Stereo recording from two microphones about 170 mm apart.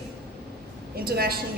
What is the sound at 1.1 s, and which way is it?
Speech, 65° right (ahead or behind).